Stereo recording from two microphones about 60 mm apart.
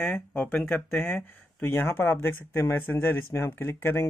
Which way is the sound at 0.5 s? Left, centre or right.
Left.